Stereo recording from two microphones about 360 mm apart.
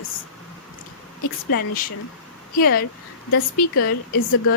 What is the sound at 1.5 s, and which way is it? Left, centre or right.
A woman's voice, left.